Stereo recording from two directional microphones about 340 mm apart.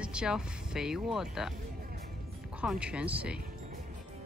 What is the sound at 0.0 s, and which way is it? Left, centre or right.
Speech, centre.